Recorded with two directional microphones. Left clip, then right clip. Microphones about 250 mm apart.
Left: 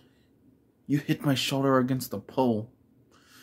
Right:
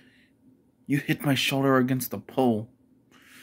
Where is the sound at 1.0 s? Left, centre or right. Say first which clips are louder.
Right 4 dB; centre.